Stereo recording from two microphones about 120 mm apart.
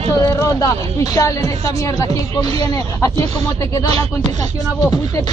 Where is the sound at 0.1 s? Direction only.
25° left (ahead or behind).